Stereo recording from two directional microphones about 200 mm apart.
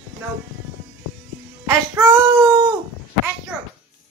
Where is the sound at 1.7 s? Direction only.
15° right (ahead or behind).